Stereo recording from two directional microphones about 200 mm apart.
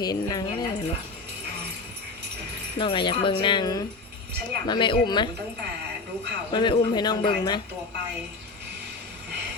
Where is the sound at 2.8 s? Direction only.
25° left (ahead or behind).